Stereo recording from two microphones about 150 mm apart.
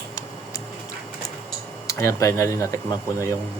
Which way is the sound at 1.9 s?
20° left (ahead or behind).